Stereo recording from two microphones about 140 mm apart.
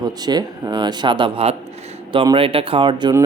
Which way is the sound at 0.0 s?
30° right (ahead or behind).